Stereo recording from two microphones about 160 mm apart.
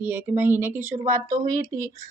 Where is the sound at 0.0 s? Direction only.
15° right (ahead or behind).